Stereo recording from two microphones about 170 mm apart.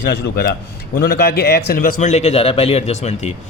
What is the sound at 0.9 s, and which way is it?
A man's voice, 65° left (ahead or behind).